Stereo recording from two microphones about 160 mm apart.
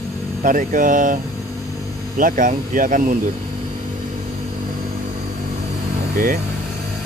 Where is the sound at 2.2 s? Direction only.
55° right (ahead or behind).